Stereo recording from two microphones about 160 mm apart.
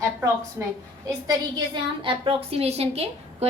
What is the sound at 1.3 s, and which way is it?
A woman's voice, 30° right (ahead or behind).